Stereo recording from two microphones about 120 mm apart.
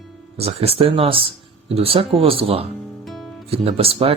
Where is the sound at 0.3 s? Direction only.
55° right (ahead or behind).